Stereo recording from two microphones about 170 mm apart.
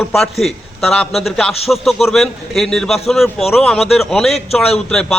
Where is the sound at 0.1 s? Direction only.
Centre (ahead or behind).